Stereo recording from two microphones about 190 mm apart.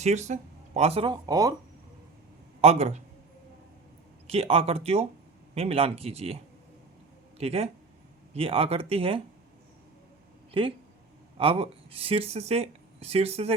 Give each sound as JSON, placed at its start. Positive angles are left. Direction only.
{"t": 0.0, "sound": "speech", "side_deg": -35}
{"t": 2.6, "sound": "speech", "side_deg": -35}
{"t": 4.3, "sound": "speech", "side_deg": -30}
{"t": 10.5, "sound": "speech", "side_deg": -30}